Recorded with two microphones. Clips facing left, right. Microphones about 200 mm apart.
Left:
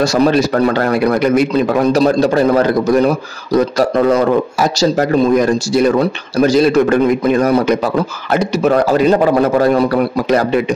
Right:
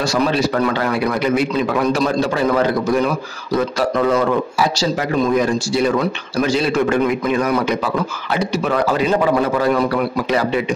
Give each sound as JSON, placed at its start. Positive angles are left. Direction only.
{"t": 0.0, "sound": "a man's voice", "side_deg": 40}